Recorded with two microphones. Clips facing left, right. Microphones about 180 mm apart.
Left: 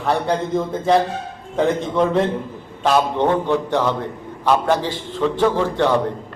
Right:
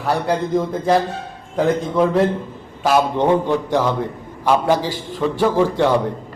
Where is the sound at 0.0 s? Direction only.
5° right (ahead or behind).